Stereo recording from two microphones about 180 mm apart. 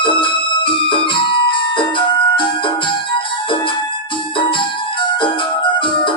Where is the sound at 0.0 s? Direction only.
30° left (ahead or behind).